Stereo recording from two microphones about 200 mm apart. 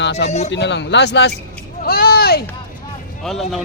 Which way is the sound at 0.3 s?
35° left (ahead or behind).